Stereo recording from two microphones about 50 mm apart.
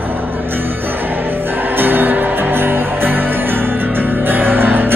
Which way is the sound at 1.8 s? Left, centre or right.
Right.